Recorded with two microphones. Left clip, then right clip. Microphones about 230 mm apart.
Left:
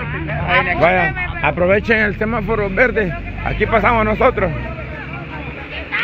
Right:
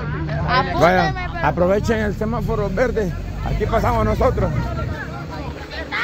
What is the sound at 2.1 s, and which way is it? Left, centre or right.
Speech, left.